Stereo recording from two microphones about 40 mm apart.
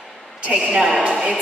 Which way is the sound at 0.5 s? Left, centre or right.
Right.